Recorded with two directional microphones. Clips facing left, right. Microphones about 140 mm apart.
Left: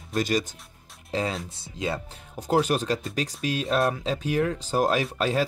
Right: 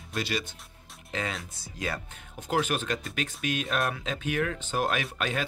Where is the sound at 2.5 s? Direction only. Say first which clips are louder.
Left 5 dB; 35° left (ahead or behind).